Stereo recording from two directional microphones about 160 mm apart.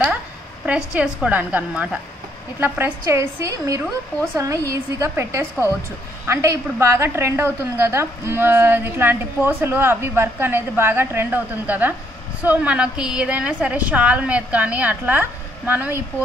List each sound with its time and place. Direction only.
0.7 s a woman's voice: 5° right (ahead or behind)